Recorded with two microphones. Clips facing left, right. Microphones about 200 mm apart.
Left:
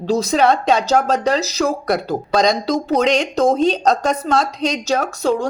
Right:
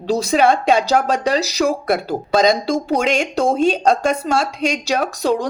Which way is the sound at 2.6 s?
25° right (ahead or behind).